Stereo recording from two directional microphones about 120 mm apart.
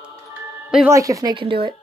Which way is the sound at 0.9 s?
25° right (ahead or behind).